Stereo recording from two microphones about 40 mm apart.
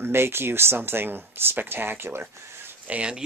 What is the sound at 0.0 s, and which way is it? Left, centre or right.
Speech, right.